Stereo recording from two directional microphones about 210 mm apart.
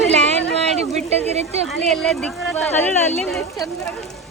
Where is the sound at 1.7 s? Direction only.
Centre (ahead or behind).